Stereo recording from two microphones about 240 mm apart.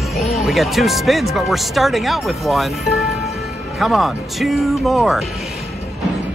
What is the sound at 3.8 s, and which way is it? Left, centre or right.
Speech, centre.